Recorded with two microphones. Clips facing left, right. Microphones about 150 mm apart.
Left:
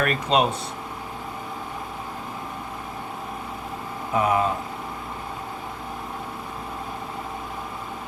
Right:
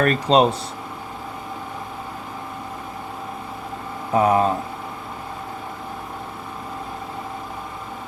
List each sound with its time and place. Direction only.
0.0 s speech: 35° right (ahead or behind)
4.1 s speech: 35° right (ahead or behind)